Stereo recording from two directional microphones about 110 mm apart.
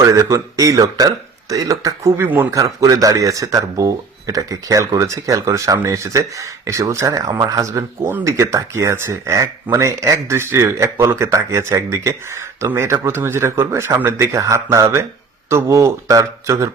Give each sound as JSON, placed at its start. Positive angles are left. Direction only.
{"t": 0.0, "sound": "speech", "side_deg": -30}
{"t": 2.2, "sound": "speech", "side_deg": -20}
{"t": 2.5, "sound": "speech", "side_deg": -30}